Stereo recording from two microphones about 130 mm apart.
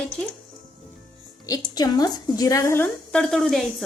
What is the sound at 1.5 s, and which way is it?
A woman's voice, 30° left (ahead or behind).